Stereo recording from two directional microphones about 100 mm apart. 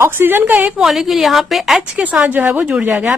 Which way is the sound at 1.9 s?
15° right (ahead or behind).